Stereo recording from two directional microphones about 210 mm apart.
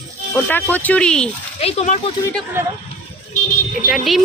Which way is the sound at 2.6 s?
10° right (ahead or behind).